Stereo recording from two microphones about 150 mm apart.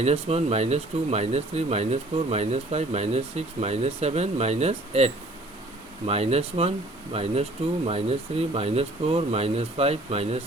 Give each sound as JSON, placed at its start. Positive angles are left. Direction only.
{"t": 0.0, "sound": "speech", "side_deg": -45}